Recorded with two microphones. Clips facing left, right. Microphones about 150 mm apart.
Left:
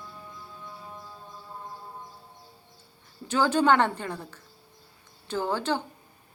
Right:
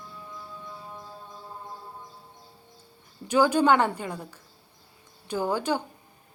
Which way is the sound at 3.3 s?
10° right (ahead or behind).